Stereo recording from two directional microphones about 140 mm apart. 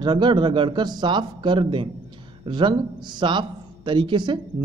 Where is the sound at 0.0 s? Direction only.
35° right (ahead or behind).